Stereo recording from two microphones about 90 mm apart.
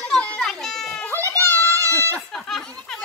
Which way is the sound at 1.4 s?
35° right (ahead or behind).